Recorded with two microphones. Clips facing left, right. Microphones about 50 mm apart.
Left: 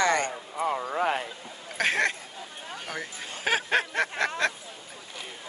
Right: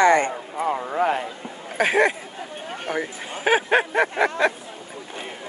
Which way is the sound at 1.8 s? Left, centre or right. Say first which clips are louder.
Right 6 dB; centre.